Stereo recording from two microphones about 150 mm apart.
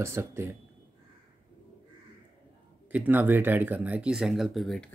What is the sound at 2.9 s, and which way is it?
Speech, 10° right (ahead or behind).